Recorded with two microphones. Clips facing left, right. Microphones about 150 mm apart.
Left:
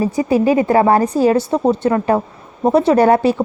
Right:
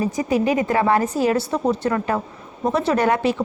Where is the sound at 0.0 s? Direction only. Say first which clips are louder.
Left 5 dB; 30° left (ahead or behind).